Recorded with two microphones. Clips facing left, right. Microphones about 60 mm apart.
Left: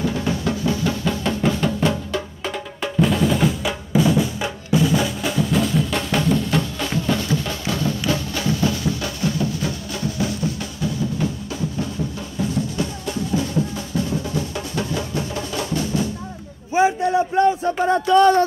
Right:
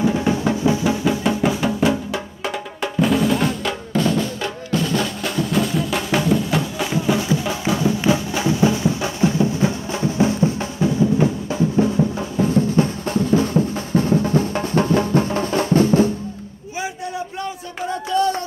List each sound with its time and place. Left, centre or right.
0.0 s music: centre
2.8 s drum: centre
8.1 s music: centre; by 16.1 s right
17.4 s a sound: left